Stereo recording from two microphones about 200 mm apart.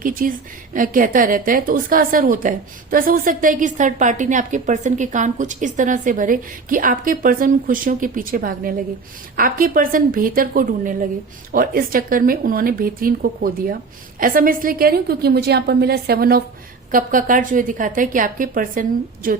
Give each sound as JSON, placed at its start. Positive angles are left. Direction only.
{"t": 0.0, "sound": "a woman's voice", "side_deg": -45}